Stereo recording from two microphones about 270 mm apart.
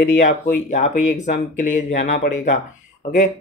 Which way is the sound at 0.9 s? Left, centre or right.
Left.